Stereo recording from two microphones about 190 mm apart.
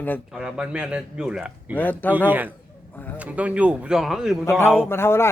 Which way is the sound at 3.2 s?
5° right (ahead or behind).